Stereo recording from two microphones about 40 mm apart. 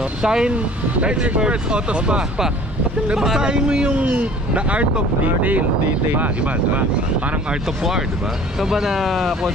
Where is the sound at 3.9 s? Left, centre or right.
Right.